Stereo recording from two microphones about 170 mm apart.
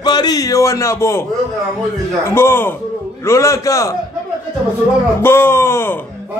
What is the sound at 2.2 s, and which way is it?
Speech, 15° left (ahead or behind).